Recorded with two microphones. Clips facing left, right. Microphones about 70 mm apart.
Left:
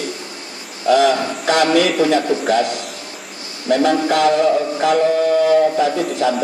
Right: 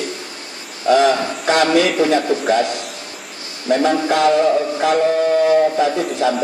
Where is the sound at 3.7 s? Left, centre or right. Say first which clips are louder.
Left 1 dB; right.